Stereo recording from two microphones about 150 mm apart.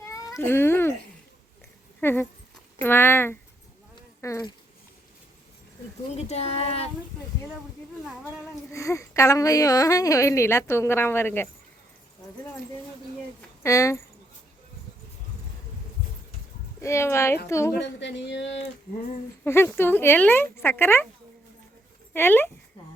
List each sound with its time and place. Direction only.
0.3 s cat: 15° left (ahead or behind)
2.0 s speech: 15° left (ahead or behind)
6.1 s speech: 45° left (ahead or behind)
8.7 s speech: 20° left (ahead or behind)
13.6 s speech: 20° left (ahead or behind)
16.8 s speech: 20° left (ahead or behind)
19.5 s speech: 15° left (ahead or behind)
22.1 s speech: 15° left (ahead or behind)